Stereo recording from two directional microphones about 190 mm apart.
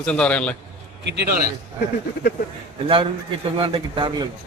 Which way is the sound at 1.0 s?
65° right (ahead or behind).